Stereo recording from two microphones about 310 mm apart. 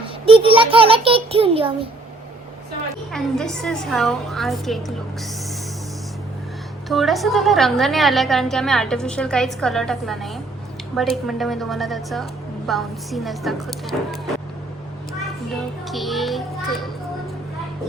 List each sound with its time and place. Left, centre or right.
0.3 s a sound: centre
3.1 s a woman's voice: centre
6.8 s a woman's voice: centre
15.9 s a woman's voice: centre